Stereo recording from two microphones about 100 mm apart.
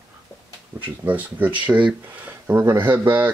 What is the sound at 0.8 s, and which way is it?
Speech, 15° right (ahead or behind).